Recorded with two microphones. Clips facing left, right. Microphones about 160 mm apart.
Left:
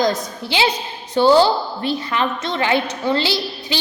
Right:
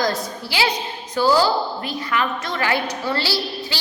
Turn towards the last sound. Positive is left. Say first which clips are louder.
# left 2 dB
turn(degrees=20)  # may be behind; listen again after turning